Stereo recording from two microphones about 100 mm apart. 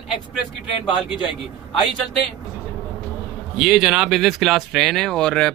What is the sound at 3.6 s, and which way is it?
Speech, 5° right (ahead or behind).